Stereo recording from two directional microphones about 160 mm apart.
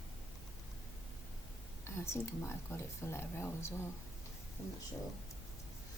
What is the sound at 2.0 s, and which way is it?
A woman's voice, 15° left (ahead or behind).